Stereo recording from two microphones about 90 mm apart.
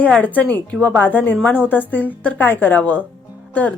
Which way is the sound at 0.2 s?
15° left (ahead or behind).